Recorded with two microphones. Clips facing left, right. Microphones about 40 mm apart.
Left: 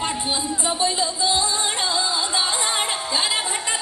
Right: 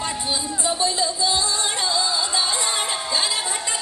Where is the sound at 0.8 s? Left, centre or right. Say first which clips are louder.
Even; left.